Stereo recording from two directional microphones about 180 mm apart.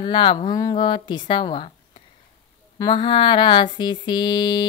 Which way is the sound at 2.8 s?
25° left (ahead or behind).